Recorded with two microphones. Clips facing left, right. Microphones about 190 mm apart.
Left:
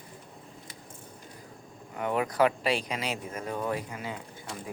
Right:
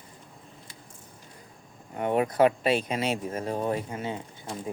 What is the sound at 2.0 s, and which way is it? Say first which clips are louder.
Speech: right 3 dB; 25° right (ahead or behind).